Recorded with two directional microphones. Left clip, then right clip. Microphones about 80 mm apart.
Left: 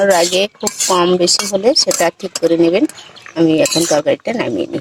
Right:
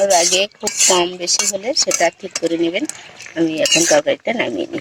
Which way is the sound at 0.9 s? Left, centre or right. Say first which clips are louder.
Left 5 dB; centre.